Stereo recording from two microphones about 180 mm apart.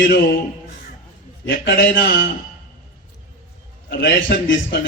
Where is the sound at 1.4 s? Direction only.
65° left (ahead or behind).